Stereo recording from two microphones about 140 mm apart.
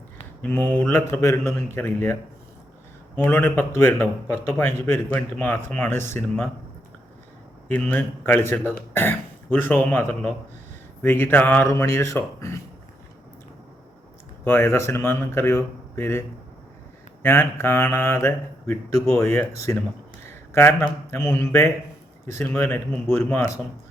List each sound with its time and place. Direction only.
0.4 s speech: 15° left (ahead or behind)
3.2 s speech: 15° left (ahead or behind)
7.7 s speech: 15° left (ahead or behind)
14.4 s speech: 15° left (ahead or behind)
17.2 s speech: 15° left (ahead or behind)